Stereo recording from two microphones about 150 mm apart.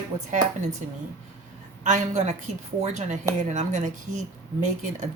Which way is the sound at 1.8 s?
50° right (ahead or behind).